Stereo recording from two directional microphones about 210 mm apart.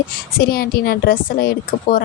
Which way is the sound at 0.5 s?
45° left (ahead or behind).